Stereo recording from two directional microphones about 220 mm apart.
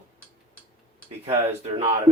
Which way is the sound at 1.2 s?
30° right (ahead or behind).